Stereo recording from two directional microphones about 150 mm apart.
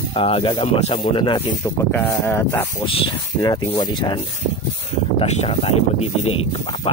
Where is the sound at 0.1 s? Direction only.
40° left (ahead or behind).